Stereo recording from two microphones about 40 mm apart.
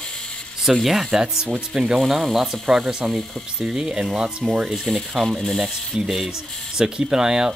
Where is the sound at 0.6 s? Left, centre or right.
Centre.